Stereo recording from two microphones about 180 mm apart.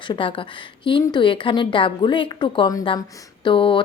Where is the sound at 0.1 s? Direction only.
30° left (ahead or behind).